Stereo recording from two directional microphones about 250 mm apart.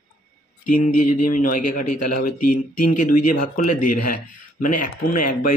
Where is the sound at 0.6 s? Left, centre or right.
Left.